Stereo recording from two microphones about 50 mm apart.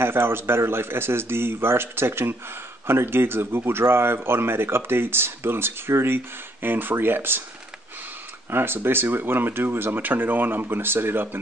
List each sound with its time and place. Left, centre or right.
0.0 s speech: right
8.5 s speech: right